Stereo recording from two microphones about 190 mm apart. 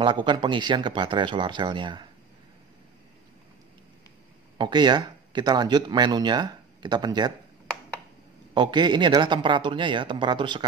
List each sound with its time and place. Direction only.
0.0 s speech: 25° right (ahead or behind)
4.6 s speech: 25° right (ahead or behind)
8.5 s speech: 25° right (ahead or behind)